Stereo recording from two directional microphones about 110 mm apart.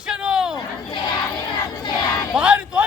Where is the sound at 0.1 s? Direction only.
5° right (ahead or behind).